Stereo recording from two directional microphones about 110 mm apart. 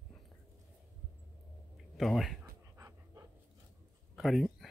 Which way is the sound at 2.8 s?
25° right (ahead or behind).